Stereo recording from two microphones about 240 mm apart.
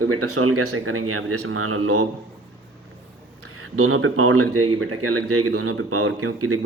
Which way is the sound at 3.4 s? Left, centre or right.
Right.